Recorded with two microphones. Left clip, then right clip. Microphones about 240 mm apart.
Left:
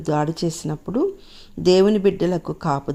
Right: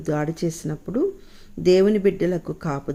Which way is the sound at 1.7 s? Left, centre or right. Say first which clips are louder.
Left 1 dB; centre.